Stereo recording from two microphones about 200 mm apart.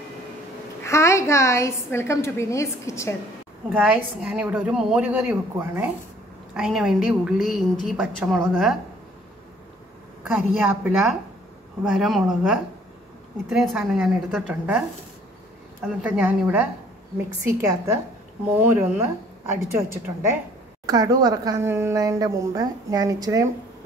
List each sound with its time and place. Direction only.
0.8 s a woman's voice: 15° left (ahead or behind)
3.7 s a woman's voice: 5° right (ahead or behind)
10.2 s a woman's voice: 10° right (ahead or behind)